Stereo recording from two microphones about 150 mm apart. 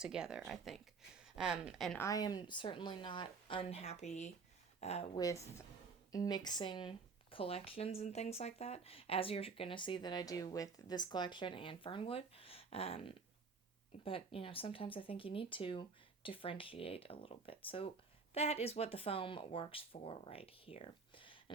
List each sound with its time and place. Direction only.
0.0 s speech: 5° right (ahead or behind)
2.0 s speech: 25° left (ahead or behind); by 5.0 s 45° left (ahead or behind)
5.1 s a woman's voice: 20° left (ahead or behind)